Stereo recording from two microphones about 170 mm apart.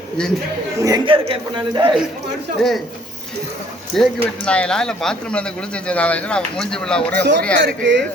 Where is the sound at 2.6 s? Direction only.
Centre (ahead or behind).